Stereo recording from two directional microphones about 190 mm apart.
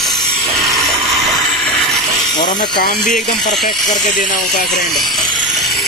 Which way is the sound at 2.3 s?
20° left (ahead or behind).